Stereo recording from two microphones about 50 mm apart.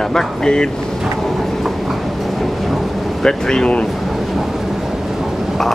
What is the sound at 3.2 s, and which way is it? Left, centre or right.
Speech, centre.